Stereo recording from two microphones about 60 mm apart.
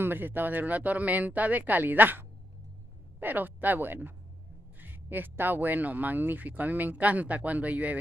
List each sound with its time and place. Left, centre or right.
0.0 s speech: right